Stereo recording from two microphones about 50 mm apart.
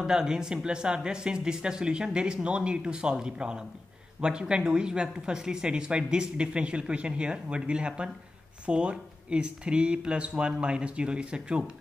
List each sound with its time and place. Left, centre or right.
0.0 s speech: centre